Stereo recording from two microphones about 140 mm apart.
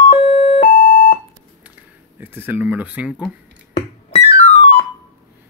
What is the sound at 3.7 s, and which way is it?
Music, 50° left (ahead or behind).